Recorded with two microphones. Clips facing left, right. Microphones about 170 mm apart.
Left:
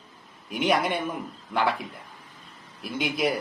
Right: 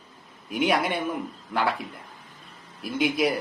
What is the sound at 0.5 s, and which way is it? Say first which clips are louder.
A man's voice: even; 5° right (ahead or behind).